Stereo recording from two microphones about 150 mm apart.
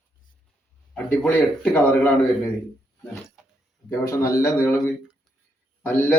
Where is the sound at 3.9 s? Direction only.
20° left (ahead or behind).